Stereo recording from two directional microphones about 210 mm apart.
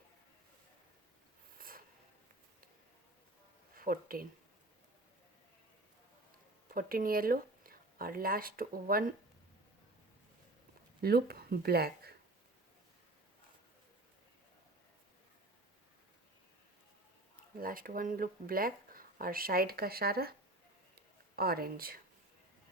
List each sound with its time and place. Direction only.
1.5 s a sound: 45° right (ahead or behind)
3.8 s speech: 45° right (ahead or behind)
6.7 s speech: 45° right (ahead or behind)
11.0 s speech: 50° right (ahead or behind)
17.6 s speech: 45° right (ahead or behind)
21.3 s speech: 45° right (ahead or behind)